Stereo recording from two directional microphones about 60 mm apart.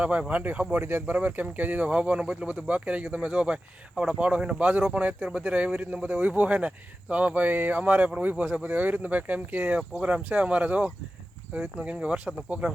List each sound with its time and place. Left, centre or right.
0.0 s speech: right